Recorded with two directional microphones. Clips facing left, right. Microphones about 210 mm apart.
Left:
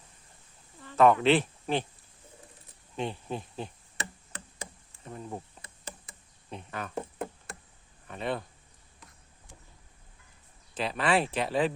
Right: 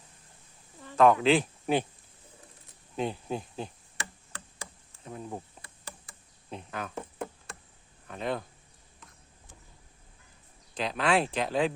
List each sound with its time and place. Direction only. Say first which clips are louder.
0.9 s speech: even; centre (ahead or behind)
2.9 s speech: right 2 dB; 5° right (ahead or behind)
3.9 s tick-tock: left 2 dB; 20° left (ahead or behind)
5.0 s speech: right 1 dB; centre (ahead or behind)
5.6 s knock: left 2 dB; 20° left (ahead or behind)
6.5 s speech: right 1 dB; centre (ahead or behind)
8.0 s speech: even; centre (ahead or behind)
10.8 s speech: even; 5° left (ahead or behind)